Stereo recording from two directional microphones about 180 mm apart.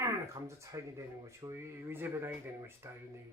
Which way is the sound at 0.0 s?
15° right (ahead or behind).